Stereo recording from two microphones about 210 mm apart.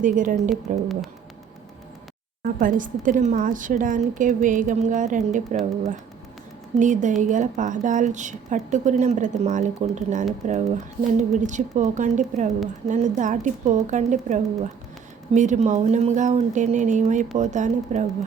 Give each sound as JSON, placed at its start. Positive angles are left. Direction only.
{"t": 0.0, "sound": "a woman's voice", "side_deg": -40}
{"t": 2.4, "sound": "a woman's voice", "side_deg": -40}
{"t": 6.7, "sound": "a woman's voice", "side_deg": -35}